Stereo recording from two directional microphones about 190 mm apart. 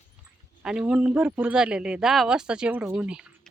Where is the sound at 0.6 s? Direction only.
5° right (ahead or behind).